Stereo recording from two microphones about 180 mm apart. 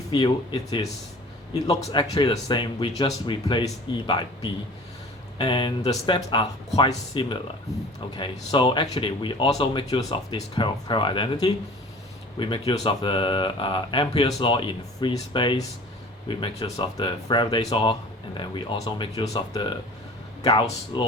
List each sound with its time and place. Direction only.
0.1 s speech: 20° left (ahead or behind)
5.4 s speech: 25° left (ahead or behind)